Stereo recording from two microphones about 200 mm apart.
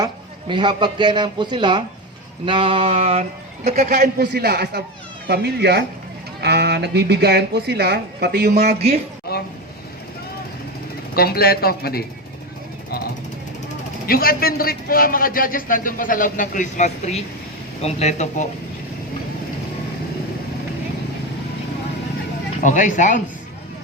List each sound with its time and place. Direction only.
0.0 s a man's voice: 25° right (ahead or behind)
4.2 s speech: 55° right (ahead or behind)
8.6 s speech: 30° right (ahead or behind)
9.3 s speech: 50° left (ahead or behind)
11.1 s a man's voice: 50° left (ahead or behind)
14.1 s a man's voice: 50° left (ahead or behind)
22.6 s speech: 40° left (ahead or behind)